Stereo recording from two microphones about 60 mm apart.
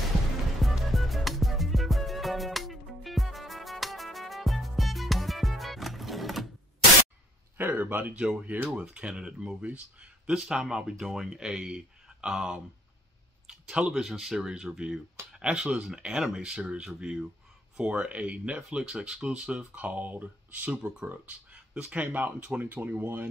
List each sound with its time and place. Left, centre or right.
0.6 s music: centre
7.5 s a sound: right
8.7 s speech: centre
13.5 s clicking: centre
14.0 s speech: centre; by 23.2 s right